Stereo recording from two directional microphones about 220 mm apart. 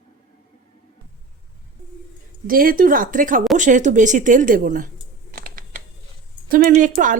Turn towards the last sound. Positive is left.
turn(degrees=-35)  # may be behind; listen again after turning